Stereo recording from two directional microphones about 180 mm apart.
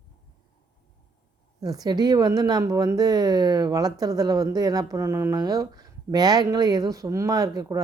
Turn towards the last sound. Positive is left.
turn(degrees=-20)  # may be behind; listen again after turning